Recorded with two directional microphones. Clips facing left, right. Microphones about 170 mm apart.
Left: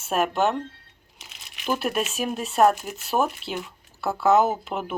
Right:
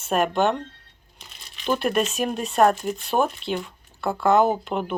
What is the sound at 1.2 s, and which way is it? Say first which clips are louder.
Crumpling: right 1 dB; 80° left.